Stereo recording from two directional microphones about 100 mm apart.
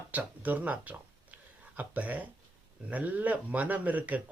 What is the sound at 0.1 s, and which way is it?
Speech, 15° right (ahead or behind).